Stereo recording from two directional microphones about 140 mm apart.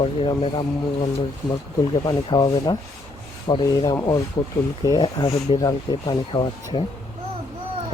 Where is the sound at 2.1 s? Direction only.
35° left (ahead or behind).